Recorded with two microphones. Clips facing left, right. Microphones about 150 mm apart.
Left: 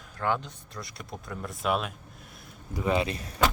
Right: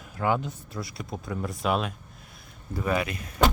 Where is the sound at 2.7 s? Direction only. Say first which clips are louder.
Even; 20° left (ahead or behind).